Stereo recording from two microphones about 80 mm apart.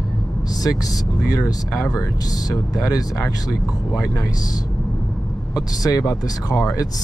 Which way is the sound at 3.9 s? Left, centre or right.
Left.